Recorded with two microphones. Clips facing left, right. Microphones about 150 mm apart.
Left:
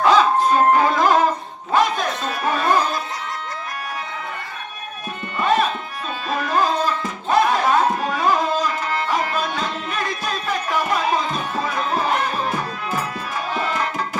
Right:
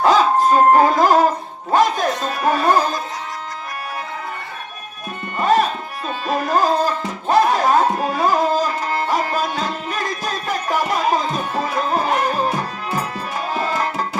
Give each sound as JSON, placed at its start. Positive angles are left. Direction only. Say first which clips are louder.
{"t": 0.0, "sound": "dog", "louder": "right 1 dB", "side_deg": -40}
{"t": 1.7, "sound": "music", "louder": "right 3 dB", "side_deg": -40}
{"t": 5.4, "sound": "tabla", "louder": "right 2 dB", "side_deg": -40}
{"t": 6.2, "sound": "music", "louder": "right 3 dB", "side_deg": -40}
{"t": 13.5, "sound": "tabla", "louder": "right 2 dB", "side_deg": -40}